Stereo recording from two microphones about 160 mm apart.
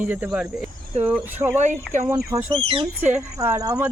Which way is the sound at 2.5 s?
30° right (ahead or behind).